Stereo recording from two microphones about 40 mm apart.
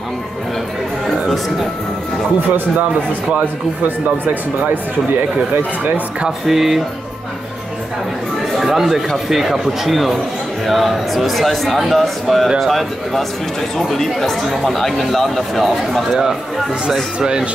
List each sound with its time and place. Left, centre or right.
3.8 s speech: right
6.2 s speech: centre
8.5 s speech: centre
17.2 s speech: centre